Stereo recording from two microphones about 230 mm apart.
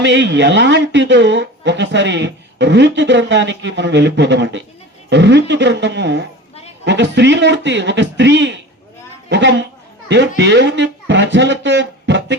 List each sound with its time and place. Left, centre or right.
0.0 s speech: right